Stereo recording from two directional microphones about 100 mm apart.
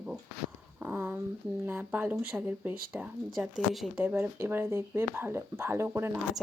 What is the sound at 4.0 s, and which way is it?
Speech, 15° right (ahead or behind).